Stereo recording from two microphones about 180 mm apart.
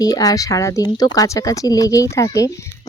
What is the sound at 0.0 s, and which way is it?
Speech, 20° left (ahead or behind).